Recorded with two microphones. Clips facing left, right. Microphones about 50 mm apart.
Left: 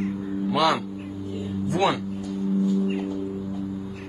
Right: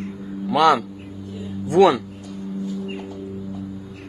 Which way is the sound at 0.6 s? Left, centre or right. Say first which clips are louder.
Right 6 dB; right.